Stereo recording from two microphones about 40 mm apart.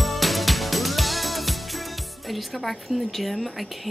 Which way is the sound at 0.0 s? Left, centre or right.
Centre.